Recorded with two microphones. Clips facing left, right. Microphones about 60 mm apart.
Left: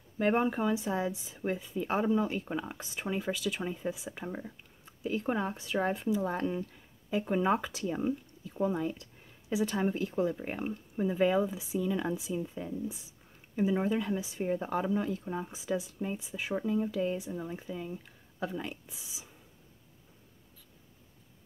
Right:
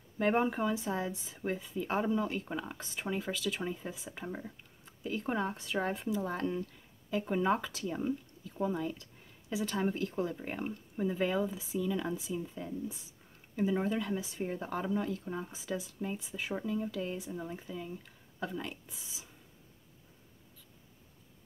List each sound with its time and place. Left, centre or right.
0.2 s a woman's voice: centre
6.3 s a woman's voice: centre